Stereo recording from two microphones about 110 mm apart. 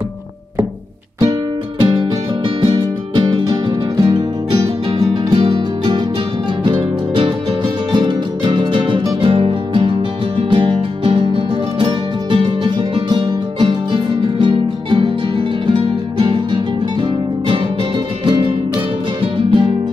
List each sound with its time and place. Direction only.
1.8 s music: 40° right (ahead or behind)
18.2 s music: 50° right (ahead or behind)